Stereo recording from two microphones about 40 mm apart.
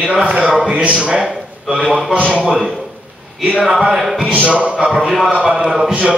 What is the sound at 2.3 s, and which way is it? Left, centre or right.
Speech, right.